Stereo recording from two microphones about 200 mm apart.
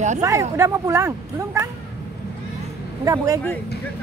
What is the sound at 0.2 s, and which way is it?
Speech, 15° right (ahead or behind).